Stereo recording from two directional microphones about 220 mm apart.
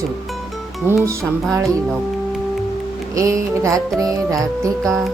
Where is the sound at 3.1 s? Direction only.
15° right (ahead or behind).